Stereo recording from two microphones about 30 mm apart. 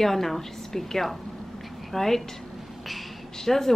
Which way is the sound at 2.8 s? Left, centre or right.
Centre.